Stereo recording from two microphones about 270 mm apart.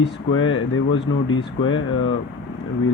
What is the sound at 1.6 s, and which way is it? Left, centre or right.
Speech, left.